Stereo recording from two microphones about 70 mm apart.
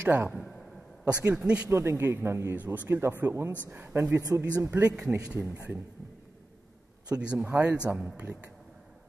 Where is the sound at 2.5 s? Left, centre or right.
Right.